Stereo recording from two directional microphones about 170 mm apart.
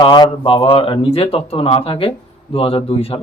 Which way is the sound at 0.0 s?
30° left (ahead or behind).